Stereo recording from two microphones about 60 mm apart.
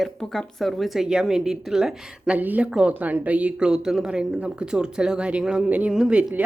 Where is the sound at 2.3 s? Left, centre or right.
Right.